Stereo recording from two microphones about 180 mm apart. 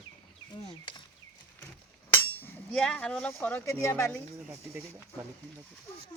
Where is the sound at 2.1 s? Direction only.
10° left (ahead or behind).